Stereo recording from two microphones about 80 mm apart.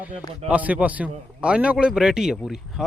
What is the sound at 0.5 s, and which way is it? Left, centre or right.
A man's voice, centre.